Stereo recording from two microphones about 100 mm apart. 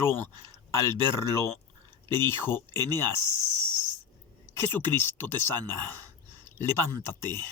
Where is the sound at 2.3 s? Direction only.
25° left (ahead or behind).